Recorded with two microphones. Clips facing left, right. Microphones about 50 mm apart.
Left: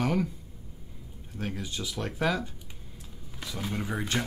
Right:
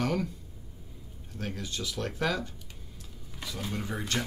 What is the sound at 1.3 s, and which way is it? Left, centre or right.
Speech, centre.